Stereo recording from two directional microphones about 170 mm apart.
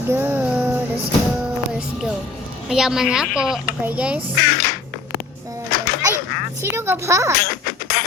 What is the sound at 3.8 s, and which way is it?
Music, 10° right (ahead or behind).